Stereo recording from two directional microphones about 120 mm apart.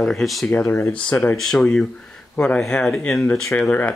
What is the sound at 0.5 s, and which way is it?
Speech, 20° left (ahead or behind).